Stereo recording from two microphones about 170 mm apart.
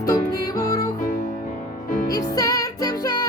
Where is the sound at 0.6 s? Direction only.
20° left (ahead or behind).